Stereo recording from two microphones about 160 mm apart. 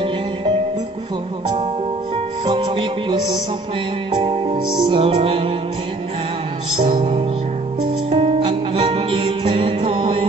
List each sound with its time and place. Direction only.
2.4 s music: 30° right (ahead or behind)
6.8 s music: 30° right (ahead or behind)